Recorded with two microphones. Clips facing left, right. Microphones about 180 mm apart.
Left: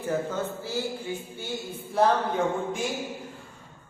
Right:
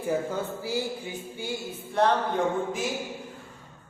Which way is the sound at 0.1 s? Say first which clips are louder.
Even; 10° right (ahead or behind).